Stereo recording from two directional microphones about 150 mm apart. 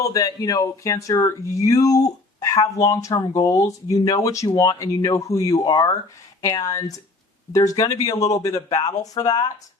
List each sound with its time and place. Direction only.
0.0 s speech: 25° left (ahead or behind)